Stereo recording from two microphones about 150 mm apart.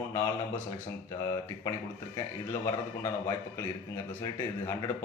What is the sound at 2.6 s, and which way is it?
A man's voice, 20° left (ahead or behind).